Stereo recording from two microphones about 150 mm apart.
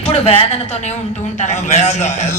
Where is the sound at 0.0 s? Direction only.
40° left (ahead or behind).